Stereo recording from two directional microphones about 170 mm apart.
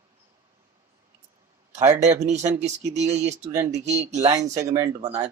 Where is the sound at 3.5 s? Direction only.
15° right (ahead or behind).